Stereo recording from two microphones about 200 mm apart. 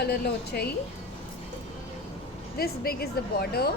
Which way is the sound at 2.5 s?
50° left (ahead or behind).